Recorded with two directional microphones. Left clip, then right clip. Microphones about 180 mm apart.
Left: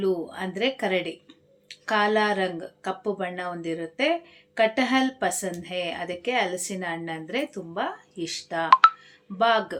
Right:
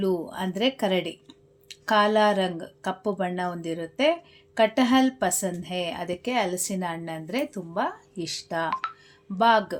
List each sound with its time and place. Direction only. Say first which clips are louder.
0.0 s speech: even; 40° right (ahead or behind)